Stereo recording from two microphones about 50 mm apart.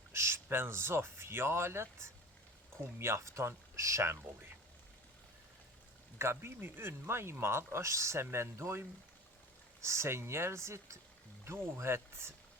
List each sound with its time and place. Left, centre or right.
0.1 s a sound: right
0.5 s speech: right
6.1 s speech: right
9.8 s speech: right
11.4 s speech: right